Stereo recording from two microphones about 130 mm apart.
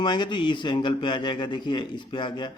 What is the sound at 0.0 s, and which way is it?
A man's voice, 35° left (ahead or behind).